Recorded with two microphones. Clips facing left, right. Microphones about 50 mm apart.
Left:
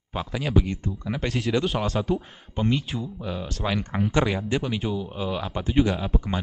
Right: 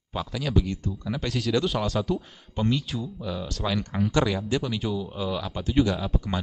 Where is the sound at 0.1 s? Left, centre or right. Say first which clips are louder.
Left 2 dB; left.